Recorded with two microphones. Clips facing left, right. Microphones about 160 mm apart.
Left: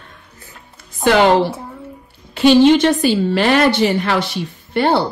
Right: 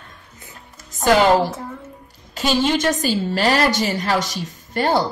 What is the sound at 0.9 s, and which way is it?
A woman's voice, 45° right (ahead or behind).